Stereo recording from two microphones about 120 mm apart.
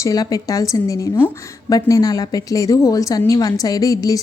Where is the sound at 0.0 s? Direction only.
30° left (ahead or behind).